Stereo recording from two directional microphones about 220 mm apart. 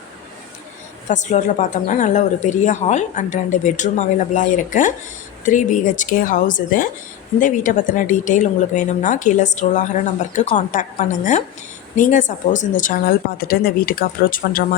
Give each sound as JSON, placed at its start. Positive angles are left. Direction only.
{"t": 1.0, "sound": "a woman's voice", "side_deg": 35}